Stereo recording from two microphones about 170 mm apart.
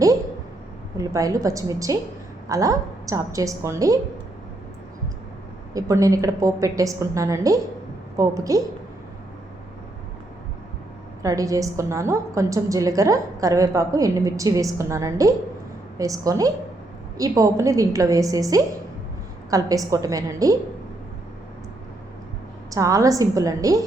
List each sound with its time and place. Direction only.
0.9 s a woman's voice: 20° right (ahead or behind)
5.7 s a woman's voice: 20° right (ahead or behind)
11.2 s a woman's voice: 20° right (ahead or behind)
22.7 s a woman's voice: 20° right (ahead or behind)